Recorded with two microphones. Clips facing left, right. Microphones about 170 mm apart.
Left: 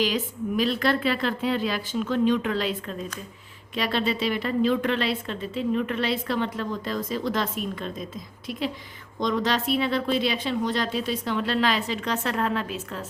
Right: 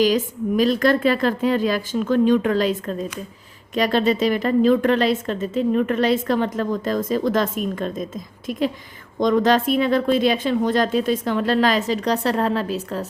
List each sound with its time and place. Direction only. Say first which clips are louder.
0.0 s a woman's voice: right 7 dB; 45° right (ahead or behind)